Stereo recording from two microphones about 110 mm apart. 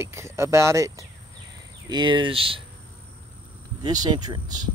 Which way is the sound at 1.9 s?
45° right (ahead or behind).